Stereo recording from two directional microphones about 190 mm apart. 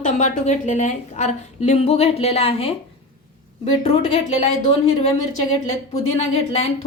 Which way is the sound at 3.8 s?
35° left (ahead or behind).